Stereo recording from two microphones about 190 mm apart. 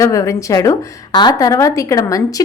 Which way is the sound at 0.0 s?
15° left (ahead or behind).